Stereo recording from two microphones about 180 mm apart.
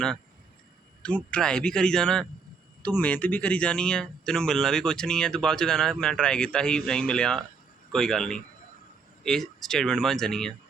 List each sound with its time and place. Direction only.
1.0 s speech: 5° left (ahead or behind)